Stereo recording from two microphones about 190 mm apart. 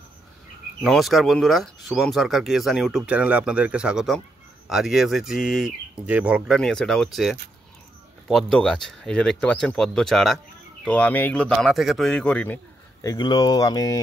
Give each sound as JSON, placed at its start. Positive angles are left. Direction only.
{"t": 0.8, "sound": "speech", "side_deg": 0}
{"t": 13.0, "sound": "speech", "side_deg": 20}